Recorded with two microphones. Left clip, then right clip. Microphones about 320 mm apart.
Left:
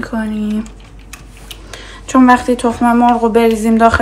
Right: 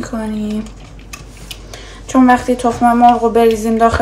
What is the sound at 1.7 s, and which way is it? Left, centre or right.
A woman's voice, left.